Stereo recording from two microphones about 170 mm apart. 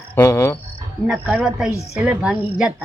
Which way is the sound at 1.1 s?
5° right (ahead or behind).